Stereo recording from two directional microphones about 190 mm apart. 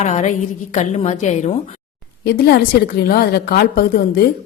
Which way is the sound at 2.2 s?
55° left (ahead or behind).